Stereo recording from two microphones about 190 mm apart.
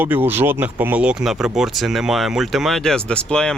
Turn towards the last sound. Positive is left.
turn(degrees=5)  # may be behind; listen again after turning